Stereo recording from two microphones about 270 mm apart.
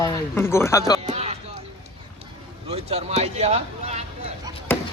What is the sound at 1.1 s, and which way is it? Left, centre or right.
Music, right.